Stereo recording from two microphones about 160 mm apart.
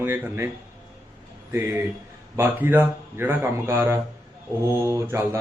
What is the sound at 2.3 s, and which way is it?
A man's voice, 10° right (ahead or behind).